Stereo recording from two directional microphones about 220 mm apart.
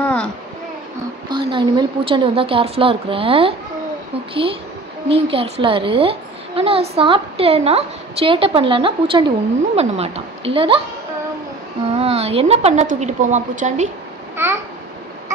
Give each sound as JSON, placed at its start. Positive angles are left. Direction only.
{"t": 0.0, "sound": "a sound", "side_deg": 5}
{"t": 1.3, "sound": "a child's voice", "side_deg": -20}
{"t": 11.9, "sound": "a woman's voice", "side_deg": -25}
{"t": 14.3, "sound": "babbling", "side_deg": -10}